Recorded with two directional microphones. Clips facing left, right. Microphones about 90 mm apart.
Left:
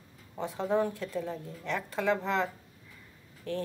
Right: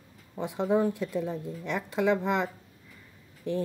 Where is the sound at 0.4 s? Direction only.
15° right (ahead or behind).